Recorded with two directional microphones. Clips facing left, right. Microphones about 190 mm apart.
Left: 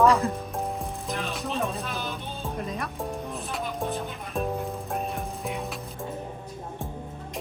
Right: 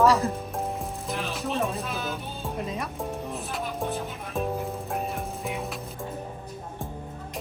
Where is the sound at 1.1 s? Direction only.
Centre (ahead or behind).